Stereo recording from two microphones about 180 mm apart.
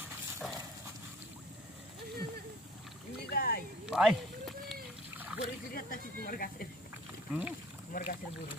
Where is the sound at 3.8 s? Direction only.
5° right (ahead or behind).